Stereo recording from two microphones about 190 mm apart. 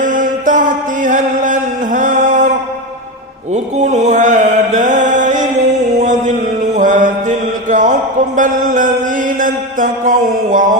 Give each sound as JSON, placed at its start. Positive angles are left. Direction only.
{"t": 0.0, "sound": "music", "side_deg": -45}
{"t": 3.5, "sound": "mantra", "side_deg": -40}
{"t": 6.0, "sound": "a sound", "side_deg": -40}
{"t": 6.7, "sound": "mantra", "side_deg": -40}
{"t": 8.4, "sound": "a sound", "side_deg": -40}
{"t": 9.4, "sound": "mantra", "side_deg": -45}